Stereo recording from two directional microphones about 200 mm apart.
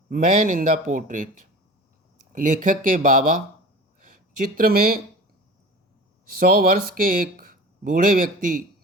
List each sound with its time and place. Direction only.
0.1 s speech: 40° right (ahead or behind)
4.0 s a sound: 45° right (ahead or behind)
6.4 s speech: 45° right (ahead or behind)